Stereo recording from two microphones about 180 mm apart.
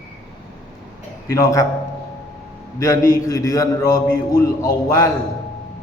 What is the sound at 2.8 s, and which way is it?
A man's voice, 20° left (ahead or behind).